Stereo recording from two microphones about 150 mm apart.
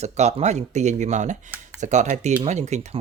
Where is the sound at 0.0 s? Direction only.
45° right (ahead or behind).